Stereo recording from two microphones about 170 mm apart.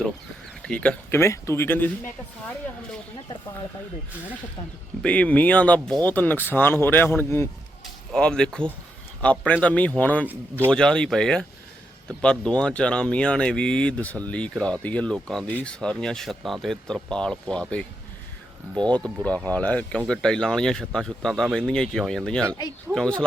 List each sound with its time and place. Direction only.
0.6 s speech: 5° left (ahead or behind)
5.0 s speech: 10° left (ahead or behind)
8.1 s speech: 5° left (ahead or behind)
10.2 s a man's voice: 10° right (ahead or behind)
10.7 s speech: 5° left (ahead or behind)
18.8 s speech: 25° right (ahead or behind)
19.0 s speech: 10° left (ahead or behind)